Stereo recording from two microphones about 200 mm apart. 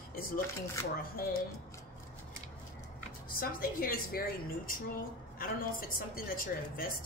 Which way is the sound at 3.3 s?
45° left (ahead or behind).